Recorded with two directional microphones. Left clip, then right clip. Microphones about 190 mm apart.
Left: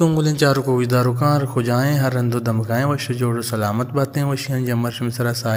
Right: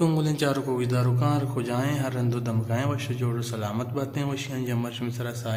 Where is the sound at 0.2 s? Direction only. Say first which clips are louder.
Left 8 dB; 30° left (ahead or behind).